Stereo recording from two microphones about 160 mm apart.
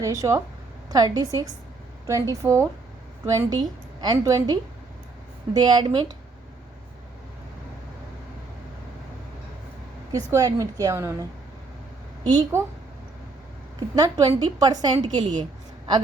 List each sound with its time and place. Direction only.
0.0 s a woman's voice: 20° right (ahead or behind)
5.5 s a woman's voice: 25° right (ahead or behind)
10.1 s a woman's voice: 20° right (ahead or behind)
13.7 s a woman's voice: 25° right (ahead or behind)